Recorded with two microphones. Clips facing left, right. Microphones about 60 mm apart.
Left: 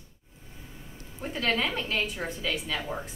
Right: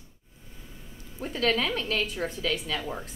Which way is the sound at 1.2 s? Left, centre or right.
Centre.